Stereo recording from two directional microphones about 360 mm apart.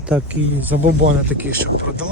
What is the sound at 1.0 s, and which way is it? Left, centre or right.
Speech, right.